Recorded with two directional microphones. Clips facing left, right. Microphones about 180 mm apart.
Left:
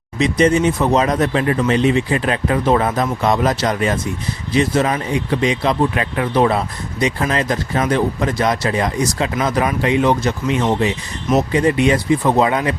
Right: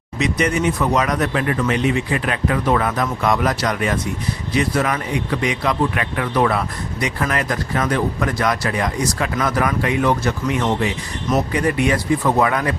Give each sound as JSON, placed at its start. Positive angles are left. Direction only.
{"t": 0.2, "sound": "speech", "side_deg": 30}